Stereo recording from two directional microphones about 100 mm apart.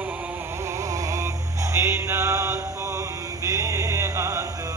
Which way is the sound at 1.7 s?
30° right (ahead or behind).